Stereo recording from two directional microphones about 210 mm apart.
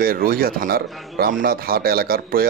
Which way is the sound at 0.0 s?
45° right (ahead or behind).